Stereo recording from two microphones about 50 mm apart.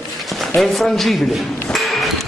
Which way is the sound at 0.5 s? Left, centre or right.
Centre.